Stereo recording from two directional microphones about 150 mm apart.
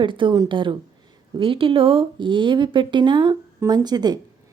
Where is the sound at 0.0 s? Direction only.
35° right (ahead or behind).